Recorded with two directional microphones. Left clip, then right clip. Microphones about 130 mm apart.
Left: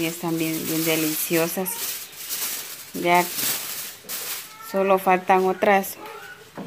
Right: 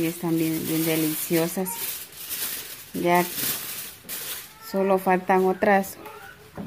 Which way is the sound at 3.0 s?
15° right (ahead or behind).